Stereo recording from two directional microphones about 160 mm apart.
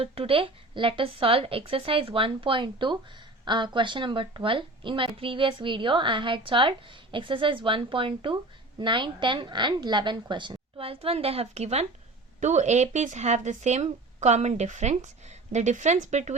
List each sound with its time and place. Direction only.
0.0 s a woman's voice: 35° right (ahead or behind)